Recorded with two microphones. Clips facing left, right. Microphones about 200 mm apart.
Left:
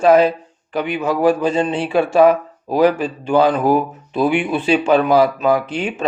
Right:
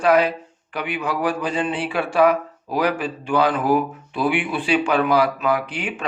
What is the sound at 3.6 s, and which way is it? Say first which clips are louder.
Speech: left 3 dB; 40° left (ahead or behind).